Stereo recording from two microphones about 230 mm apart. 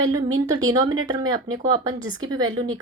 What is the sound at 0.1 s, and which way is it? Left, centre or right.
Speech, centre.